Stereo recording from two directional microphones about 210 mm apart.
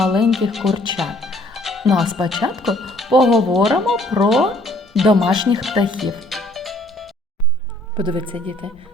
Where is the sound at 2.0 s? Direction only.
20° right (ahead or behind).